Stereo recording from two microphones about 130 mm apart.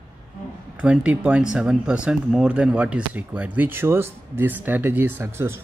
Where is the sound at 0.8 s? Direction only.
10° right (ahead or behind).